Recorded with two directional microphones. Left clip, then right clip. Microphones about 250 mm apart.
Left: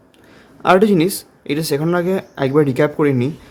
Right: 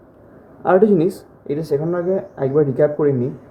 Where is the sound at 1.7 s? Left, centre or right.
Left.